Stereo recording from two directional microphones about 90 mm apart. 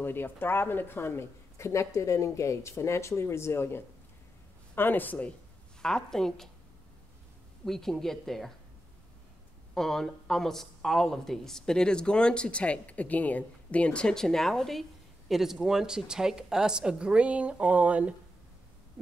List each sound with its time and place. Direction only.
0.0 s speech: 25° left (ahead or behind)
5.8 s speech: 5° left (ahead or behind)
7.6 s speech: 5° left (ahead or behind)
9.8 s speech: 5° left (ahead or behind); by 18.1 s 15° right (ahead or behind)